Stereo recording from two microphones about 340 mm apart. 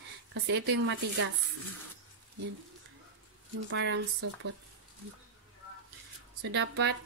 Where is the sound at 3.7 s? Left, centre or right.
Right.